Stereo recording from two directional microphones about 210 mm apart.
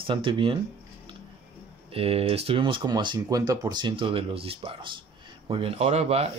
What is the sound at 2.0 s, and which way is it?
Speech, 30° right (ahead or behind).